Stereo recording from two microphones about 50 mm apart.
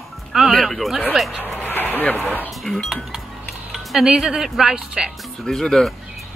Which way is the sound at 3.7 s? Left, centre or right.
Centre.